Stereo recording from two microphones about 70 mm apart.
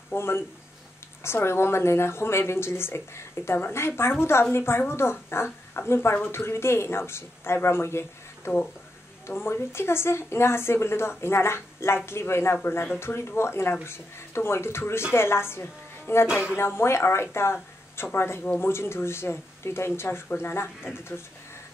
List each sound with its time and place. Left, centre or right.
0.1 s a woman's voice: left
9.3 s a woman's voice: left